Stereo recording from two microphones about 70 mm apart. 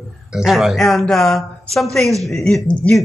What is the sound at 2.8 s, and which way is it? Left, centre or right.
Speech, left.